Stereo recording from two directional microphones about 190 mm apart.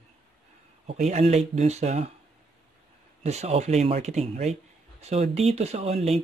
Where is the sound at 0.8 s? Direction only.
35° right (ahead or behind).